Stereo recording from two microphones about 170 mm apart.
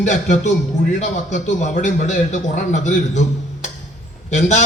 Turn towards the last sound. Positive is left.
turn(degrees=45)  # may be behind; listen again after turning